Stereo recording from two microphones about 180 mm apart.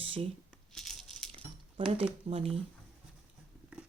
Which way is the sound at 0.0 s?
30° right (ahead or behind).